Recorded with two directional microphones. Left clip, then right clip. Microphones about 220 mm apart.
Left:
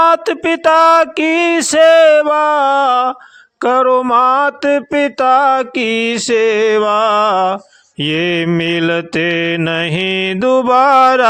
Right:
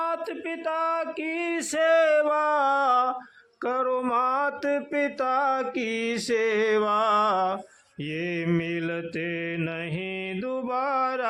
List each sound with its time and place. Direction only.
0.0 s speech: 40° left (ahead or behind); by 3.2 s 20° left (ahead or behind)
3.6 s speech: 35° left (ahead or behind)
4.1 s mantra: 30° left (ahead or behind)
8.0 s speech: 35° left (ahead or behind)